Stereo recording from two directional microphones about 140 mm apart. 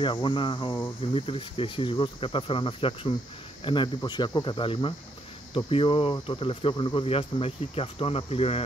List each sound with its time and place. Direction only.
0.0 s speech: 35° left (ahead or behind)